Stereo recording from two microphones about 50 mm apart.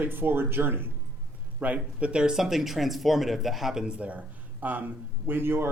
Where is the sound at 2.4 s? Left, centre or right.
Centre.